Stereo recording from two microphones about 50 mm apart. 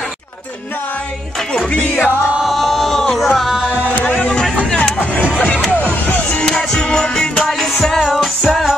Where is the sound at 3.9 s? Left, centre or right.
Left.